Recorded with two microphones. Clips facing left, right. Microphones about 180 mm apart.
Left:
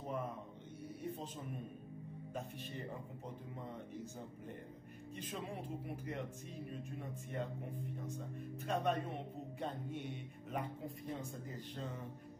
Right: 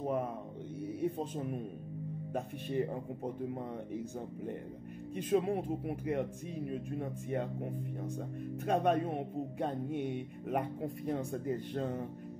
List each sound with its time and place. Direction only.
1.1 s speech: 55° right (ahead or behind)
5.1 s speech: 55° right (ahead or behind)
8.6 s speech: 55° right (ahead or behind)